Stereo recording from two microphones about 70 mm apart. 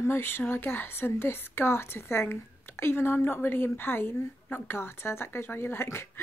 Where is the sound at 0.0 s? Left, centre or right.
Left.